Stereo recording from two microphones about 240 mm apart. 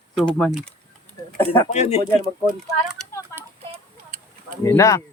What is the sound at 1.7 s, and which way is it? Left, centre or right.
Speech, left.